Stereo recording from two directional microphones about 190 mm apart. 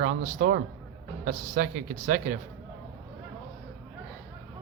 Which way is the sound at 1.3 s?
40° right (ahead or behind).